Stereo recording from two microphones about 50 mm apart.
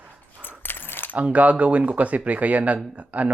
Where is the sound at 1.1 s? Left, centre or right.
Right.